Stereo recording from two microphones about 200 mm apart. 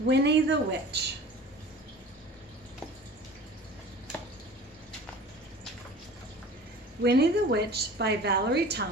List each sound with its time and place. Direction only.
0.1 s a woman's voice: 60° right (ahead or behind)
7.0 s a woman's voice: 55° right (ahead or behind)